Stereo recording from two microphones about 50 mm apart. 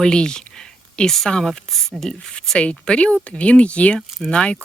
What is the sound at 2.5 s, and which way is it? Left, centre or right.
Speech, left.